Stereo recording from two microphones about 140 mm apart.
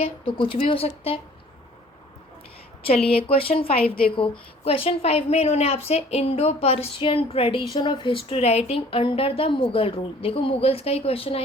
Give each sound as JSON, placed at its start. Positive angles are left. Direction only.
{"t": 0.0, "sound": "speech", "side_deg": 40}
{"t": 2.8, "sound": "a woman's voice", "side_deg": 45}
{"t": 3.8, "sound": "a woman's voice", "side_deg": 90}
{"t": 4.1, "sound": "a woman's voice", "side_deg": 40}
{"t": 7.8, "sound": "a woman's voice", "side_deg": 35}